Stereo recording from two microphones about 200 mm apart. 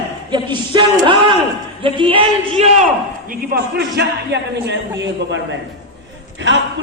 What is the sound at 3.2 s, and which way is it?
A man's voice, 50° right (ahead or behind).